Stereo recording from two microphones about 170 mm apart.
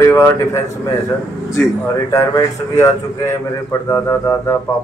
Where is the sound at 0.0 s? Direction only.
15° left (ahead or behind).